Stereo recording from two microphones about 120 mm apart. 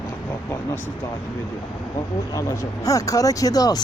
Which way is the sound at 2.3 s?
30° left (ahead or behind).